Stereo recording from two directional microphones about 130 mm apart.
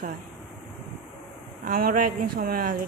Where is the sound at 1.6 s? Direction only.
90° right.